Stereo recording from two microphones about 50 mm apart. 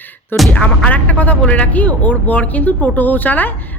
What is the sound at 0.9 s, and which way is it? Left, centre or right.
A man's voice, left.